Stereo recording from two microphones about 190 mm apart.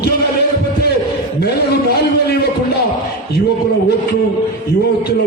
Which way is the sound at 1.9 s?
55° left (ahead or behind).